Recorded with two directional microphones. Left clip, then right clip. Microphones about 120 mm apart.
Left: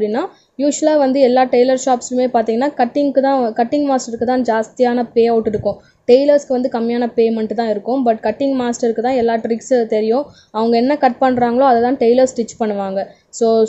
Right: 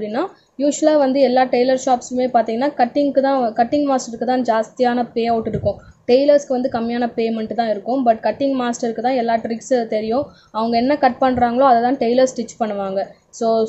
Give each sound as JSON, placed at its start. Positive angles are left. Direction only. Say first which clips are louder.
{"t": 0.0, "sound": "a woman's voice", "louder": "left 4 dB", "side_deg": 40}